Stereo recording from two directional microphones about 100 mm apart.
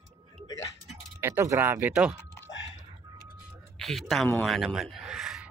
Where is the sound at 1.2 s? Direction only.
30° right (ahead or behind).